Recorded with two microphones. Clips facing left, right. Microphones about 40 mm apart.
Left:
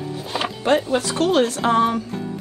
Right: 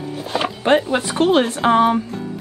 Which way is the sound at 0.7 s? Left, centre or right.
Right.